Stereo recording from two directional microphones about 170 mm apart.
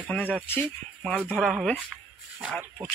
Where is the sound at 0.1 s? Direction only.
10° left (ahead or behind).